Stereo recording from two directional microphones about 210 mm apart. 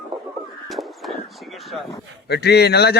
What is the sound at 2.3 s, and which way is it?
Speech, 50° left (ahead or behind).